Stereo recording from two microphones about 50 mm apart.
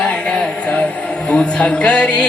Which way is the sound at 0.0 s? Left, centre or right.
Centre.